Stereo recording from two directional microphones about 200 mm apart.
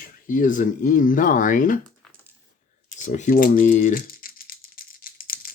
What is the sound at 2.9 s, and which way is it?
Typing, 35° left (ahead or behind).